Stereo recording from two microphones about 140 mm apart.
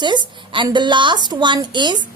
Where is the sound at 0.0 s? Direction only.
35° right (ahead or behind).